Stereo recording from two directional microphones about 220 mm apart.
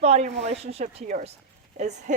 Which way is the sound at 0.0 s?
30° right (ahead or behind).